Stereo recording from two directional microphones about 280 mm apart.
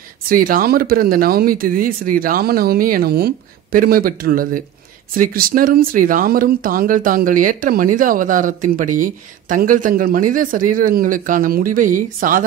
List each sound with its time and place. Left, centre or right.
0.3 s speech: right